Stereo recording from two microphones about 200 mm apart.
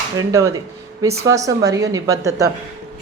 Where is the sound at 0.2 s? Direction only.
15° right (ahead or behind).